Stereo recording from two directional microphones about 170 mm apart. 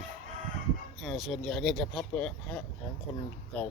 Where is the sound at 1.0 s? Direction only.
Centre (ahead or behind).